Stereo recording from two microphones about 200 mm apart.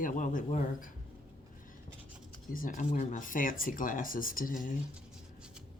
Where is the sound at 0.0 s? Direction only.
40° left (ahead or behind).